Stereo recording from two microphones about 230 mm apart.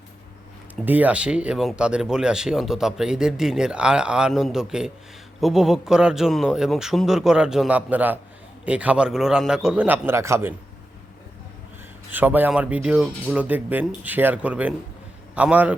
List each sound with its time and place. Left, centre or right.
0.9 s speech: centre
12.1 s speech: centre